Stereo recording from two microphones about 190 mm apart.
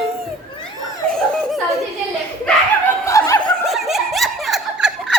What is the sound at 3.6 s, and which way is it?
Snicker, centre (ahead or behind).